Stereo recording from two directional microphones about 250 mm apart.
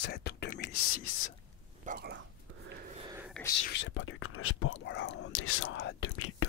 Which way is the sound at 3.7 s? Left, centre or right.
Left.